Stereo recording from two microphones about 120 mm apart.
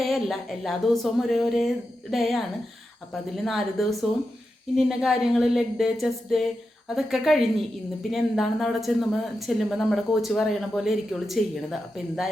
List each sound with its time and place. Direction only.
0.0 s speech: centre (ahead or behind)